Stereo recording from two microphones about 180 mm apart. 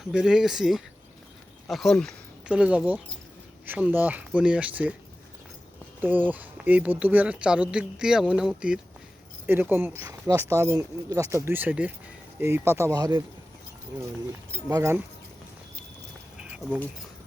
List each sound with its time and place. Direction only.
0.1 s speech: 5° right (ahead or behind)
6.0 s speech: 10° right (ahead or behind)
14.7 s speech: 15° right (ahead or behind)
16.4 s a sound: 5° right (ahead or behind)